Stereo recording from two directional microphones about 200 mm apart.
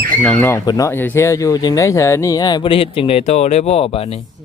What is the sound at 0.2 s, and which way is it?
Speech, 5° left (ahead or behind).